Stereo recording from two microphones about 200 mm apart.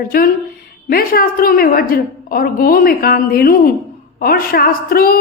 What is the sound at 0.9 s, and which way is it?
A woman's voice, 45° left (ahead or behind).